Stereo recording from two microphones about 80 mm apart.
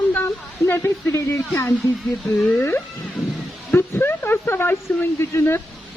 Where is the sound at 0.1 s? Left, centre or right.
Left.